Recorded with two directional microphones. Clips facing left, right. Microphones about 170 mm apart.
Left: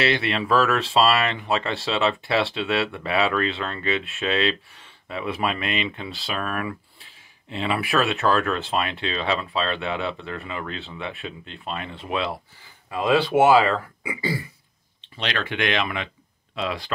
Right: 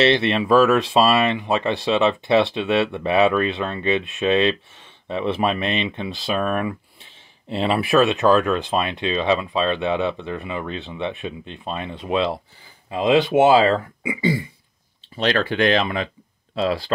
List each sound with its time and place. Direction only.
0.0 s speech: 25° right (ahead or behind)
15.1 s speech: 40° right (ahead or behind)